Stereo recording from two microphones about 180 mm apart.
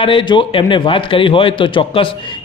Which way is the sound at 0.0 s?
30° left (ahead or behind).